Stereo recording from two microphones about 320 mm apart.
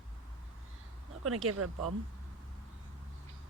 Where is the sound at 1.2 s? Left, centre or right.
Right.